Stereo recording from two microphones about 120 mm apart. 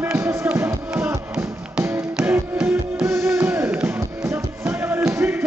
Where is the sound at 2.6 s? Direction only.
20° right (ahead or behind).